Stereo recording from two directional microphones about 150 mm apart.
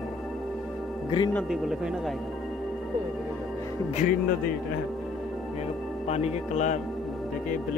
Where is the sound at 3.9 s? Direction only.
60° left (ahead or behind).